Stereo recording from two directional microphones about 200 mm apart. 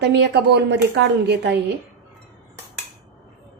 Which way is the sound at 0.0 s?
55° right (ahead or behind).